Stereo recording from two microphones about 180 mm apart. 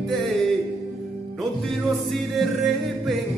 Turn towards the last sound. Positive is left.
turn(degrees=0)  # may be behind; listen again after turning